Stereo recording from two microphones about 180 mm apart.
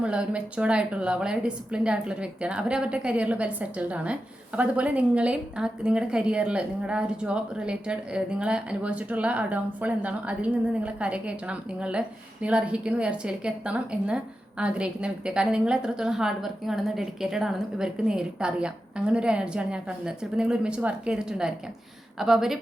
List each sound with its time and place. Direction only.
0.0 s a woman's voice: 5° right (ahead or behind)